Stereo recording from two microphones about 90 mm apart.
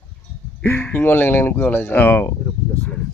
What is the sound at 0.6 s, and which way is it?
A man's voice, 20° left (ahead or behind).